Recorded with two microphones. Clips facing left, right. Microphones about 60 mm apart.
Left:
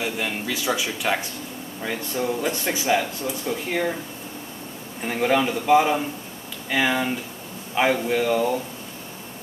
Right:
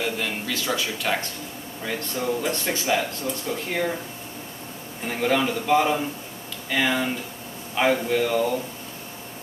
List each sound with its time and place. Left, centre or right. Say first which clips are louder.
0.0 s speech: even; centre
5.0 s speech: left 2 dB; centre